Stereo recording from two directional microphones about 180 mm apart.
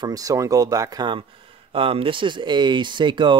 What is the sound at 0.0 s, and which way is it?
Speech, 20° right (ahead or behind).